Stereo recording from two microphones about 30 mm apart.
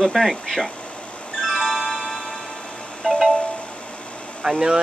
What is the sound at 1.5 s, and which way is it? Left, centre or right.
Music, centre.